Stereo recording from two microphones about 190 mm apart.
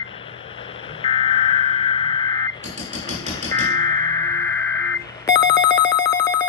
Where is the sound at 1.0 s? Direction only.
30° left (ahead or behind).